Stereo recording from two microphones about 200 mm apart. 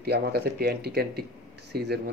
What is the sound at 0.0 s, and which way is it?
Speech, 55° right (ahead or behind).